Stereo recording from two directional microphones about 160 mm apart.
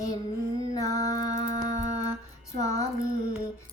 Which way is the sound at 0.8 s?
20° left (ahead or behind).